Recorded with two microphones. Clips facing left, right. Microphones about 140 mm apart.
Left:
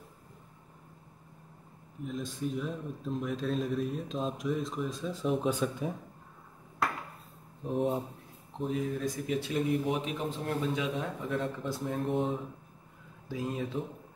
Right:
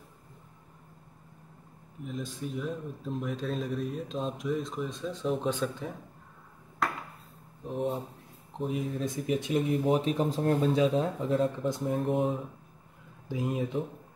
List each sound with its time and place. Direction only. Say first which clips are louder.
2.0 s speech: left 2 dB; centre (ahead or behind)
7.7 s speech: left 2 dB; centre (ahead or behind)
8.6 s speech: even; 20° right (ahead or behind)
9.8 s speech: right 6 dB; 35° right (ahead or behind); by 12.0 s 20° right (ahead or behind)
12.1 s speech: right 2 dB; 5° right (ahead or behind)
13.3 s speech: right 3 dB; 20° right (ahead or behind)